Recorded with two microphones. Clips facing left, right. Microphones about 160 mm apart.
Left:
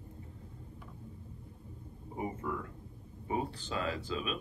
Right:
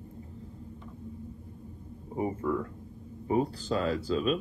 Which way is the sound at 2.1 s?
30° right (ahead or behind).